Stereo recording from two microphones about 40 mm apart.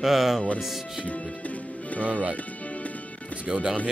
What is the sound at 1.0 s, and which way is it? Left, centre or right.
Speech, left.